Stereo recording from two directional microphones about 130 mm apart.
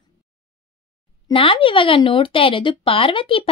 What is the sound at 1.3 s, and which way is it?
Speech, 45° left (ahead or behind).